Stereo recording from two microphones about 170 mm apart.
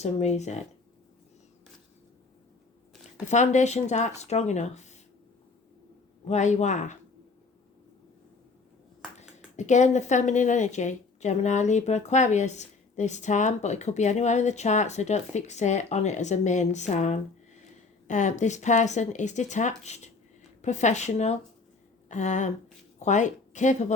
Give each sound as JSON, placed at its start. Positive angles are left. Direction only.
{"t": 0.0, "sound": "speech", "side_deg": 40}
{"t": 3.2, "sound": "speech", "side_deg": 45}
{"t": 6.2, "sound": "speech", "side_deg": 45}
{"t": 9.1, "sound": "a woman's voice", "side_deg": 45}